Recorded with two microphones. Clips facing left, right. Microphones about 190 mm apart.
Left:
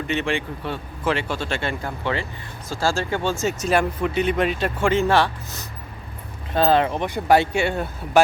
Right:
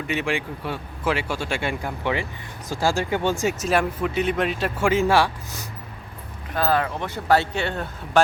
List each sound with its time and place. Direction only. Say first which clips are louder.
0.1 s speech: left 1 dB; 10° right (ahead or behind)
3.6 s speech: left 1 dB; centre (ahead or behind)
6.5 s speech: left 4 dB; 25° left (ahead or behind); by 8.2 s 10° left (ahead or behind)